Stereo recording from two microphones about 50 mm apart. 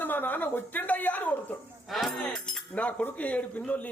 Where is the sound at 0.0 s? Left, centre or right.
Left.